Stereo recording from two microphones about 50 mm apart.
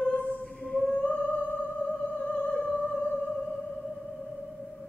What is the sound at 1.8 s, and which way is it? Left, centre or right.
Music, left.